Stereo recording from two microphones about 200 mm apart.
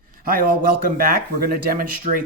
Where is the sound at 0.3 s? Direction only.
45° right (ahead or behind).